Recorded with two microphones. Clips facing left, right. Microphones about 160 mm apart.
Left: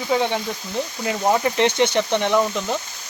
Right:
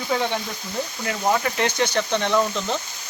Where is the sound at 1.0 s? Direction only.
25° left (ahead or behind).